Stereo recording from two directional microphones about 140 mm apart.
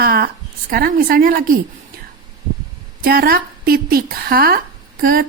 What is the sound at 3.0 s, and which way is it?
A woman's voice, 90° right.